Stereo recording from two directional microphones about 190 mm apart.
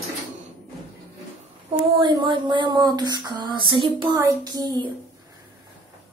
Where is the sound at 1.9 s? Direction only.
25° right (ahead or behind).